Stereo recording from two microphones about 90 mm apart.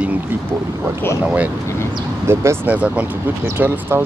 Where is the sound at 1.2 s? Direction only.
15° right (ahead or behind).